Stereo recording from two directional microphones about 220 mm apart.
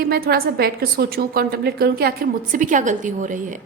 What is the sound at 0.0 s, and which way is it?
A woman's voice, 45° right (ahead or behind).